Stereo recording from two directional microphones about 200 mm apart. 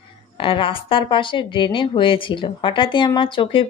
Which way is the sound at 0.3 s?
25° left (ahead or behind).